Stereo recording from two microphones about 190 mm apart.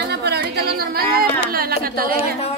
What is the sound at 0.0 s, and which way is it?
Music, 60° right (ahead or behind).